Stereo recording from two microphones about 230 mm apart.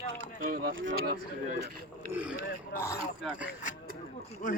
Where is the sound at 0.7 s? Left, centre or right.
Right.